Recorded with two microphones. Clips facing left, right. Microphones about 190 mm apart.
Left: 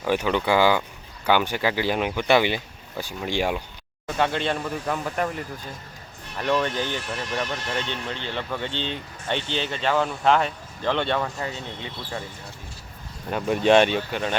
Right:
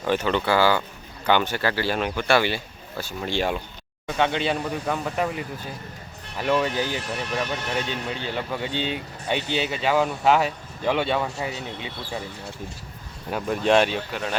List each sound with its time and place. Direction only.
0.0 s speech: 10° left (ahead or behind)
4.0 s speech: centre (ahead or behind)
13.3 s speech: centre (ahead or behind)